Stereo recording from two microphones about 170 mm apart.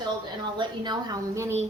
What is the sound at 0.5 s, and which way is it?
A woman's voice, 25° right (ahead or behind).